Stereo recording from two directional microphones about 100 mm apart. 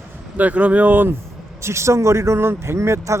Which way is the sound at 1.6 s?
30° right (ahead or behind).